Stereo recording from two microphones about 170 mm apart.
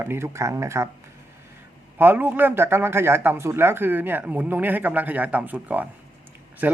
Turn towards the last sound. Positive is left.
turn(degrees=-10)  # may be behind; listen again after turning